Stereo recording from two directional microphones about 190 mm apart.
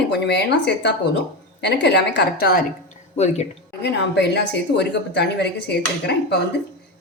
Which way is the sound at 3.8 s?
60° left (ahead or behind).